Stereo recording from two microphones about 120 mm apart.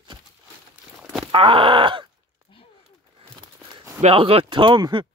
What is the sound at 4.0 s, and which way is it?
Speech, 50° right (ahead or behind).